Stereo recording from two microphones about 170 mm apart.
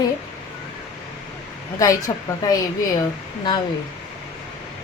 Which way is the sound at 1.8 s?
20° left (ahead or behind).